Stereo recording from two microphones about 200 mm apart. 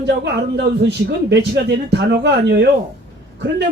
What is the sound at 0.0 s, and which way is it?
Speech, 60° right (ahead or behind).